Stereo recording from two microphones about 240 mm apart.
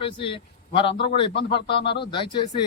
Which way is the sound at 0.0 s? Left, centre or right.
Left.